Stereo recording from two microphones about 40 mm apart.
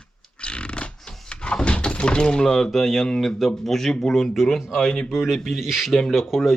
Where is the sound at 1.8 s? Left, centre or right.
Left; by 4.4 s centre.